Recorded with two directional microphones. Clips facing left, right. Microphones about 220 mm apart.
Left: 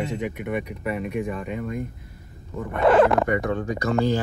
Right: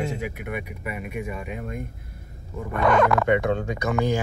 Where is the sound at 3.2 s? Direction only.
20° right (ahead or behind).